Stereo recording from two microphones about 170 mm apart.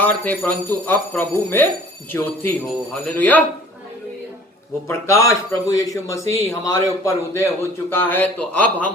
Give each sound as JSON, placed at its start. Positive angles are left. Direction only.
{"t": 0.0, "sound": "a man's voice", "side_deg": 10}
{"t": 4.9, "sound": "a man's voice", "side_deg": 15}